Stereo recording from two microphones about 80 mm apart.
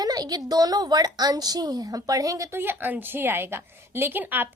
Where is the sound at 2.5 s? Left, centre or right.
Right.